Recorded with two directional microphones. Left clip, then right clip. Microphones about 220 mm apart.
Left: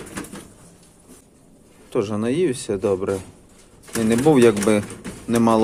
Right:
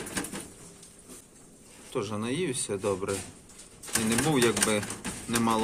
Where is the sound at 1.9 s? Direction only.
30° left (ahead or behind).